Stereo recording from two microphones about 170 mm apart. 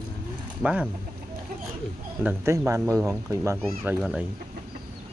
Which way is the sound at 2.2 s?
10° right (ahead or behind).